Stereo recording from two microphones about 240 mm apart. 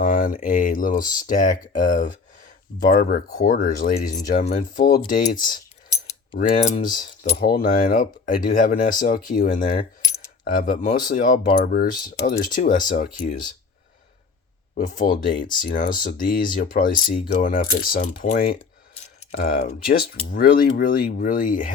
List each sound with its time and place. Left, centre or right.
0.0 s speech: left
10.0 s coin: centre
10.4 s speech: left
14.8 s speech: left